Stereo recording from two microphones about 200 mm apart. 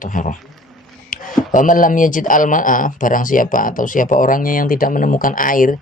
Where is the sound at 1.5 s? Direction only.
40° left (ahead or behind).